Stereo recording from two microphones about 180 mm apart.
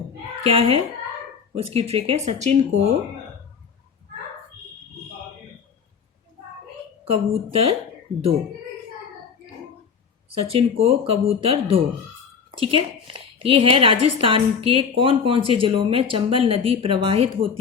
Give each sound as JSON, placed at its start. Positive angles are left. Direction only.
{"t": 0.4, "sound": "speech", "side_deg": -30}
{"t": 7.0, "sound": "speech", "side_deg": -35}
{"t": 10.2, "sound": "a woman's voice", "side_deg": -30}